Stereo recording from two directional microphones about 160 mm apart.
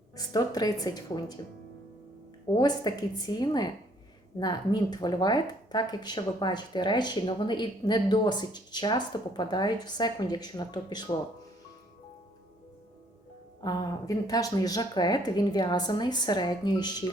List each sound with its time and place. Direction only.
0.2 s speech: 25° left (ahead or behind)
2.5 s speech: 25° left (ahead or behind)
13.6 s speech: 25° left (ahead or behind)